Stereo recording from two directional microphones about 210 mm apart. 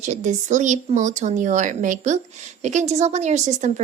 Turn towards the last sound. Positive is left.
turn(degrees=-35)  # may be behind; listen again after turning